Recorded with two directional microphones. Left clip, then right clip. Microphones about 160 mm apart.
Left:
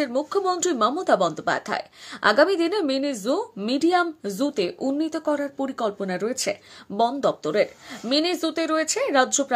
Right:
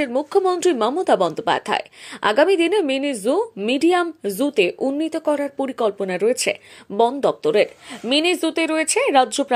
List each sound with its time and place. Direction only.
0.0 s a woman's voice: 15° right (ahead or behind)
7.0 s a woman's voice: 10° right (ahead or behind)